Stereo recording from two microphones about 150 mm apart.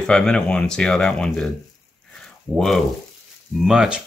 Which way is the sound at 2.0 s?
5° left (ahead or behind).